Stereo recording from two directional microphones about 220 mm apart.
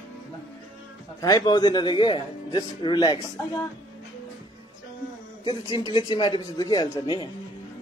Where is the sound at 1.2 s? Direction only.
20° left (ahead or behind).